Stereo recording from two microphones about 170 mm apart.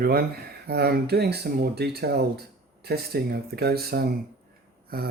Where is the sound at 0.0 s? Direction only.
60° right (ahead or behind).